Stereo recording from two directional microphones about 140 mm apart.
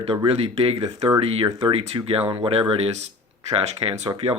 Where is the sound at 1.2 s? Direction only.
45° right (ahead or behind).